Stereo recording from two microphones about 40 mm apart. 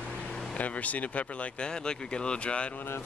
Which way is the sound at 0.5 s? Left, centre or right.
Left.